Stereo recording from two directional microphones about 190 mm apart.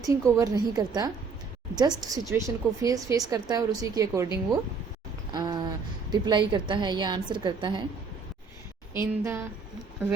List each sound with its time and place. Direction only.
0.0 s a woman's voice: 15° right (ahead or behind)
5.3 s a sound: 20° right (ahead or behind)
6.1 s a woman's voice: 20° right (ahead or behind)
8.9 s a woman's voice: 15° right (ahead or behind)